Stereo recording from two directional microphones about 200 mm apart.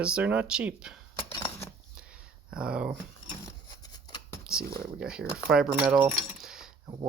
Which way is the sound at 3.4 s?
20° left (ahead or behind).